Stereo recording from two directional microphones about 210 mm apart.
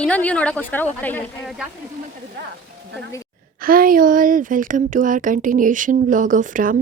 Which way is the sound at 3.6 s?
45° right (ahead or behind).